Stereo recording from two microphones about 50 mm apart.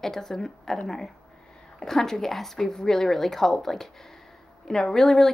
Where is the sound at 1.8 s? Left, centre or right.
Centre.